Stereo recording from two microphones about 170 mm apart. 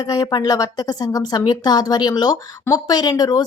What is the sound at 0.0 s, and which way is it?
A woman's voice, 25° left (ahead or behind).